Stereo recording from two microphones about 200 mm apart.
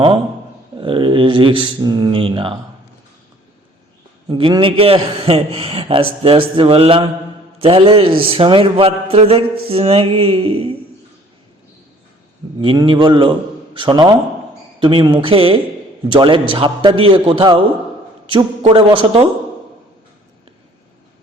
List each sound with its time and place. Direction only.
0.8 s a man's voice: 25° right (ahead or behind)
4.3 s a man's voice: 20° right (ahead or behind)
12.6 s a man's voice: 25° right (ahead or behind)
18.6 s a man's voice: 25° right (ahead or behind)